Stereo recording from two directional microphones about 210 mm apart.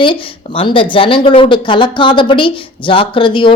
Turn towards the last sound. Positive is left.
turn(degrees=25)  # may be behind; listen again after turning